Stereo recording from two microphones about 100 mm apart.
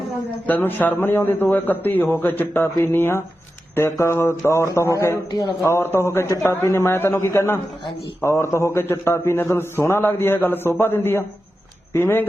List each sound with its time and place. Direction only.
0.4 s a man's voice: 20° left (ahead or behind)